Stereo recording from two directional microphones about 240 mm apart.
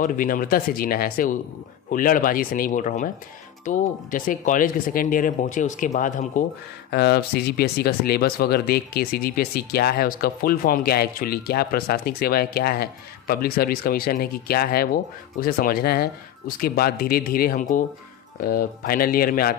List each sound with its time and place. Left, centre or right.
0.0 s speech: left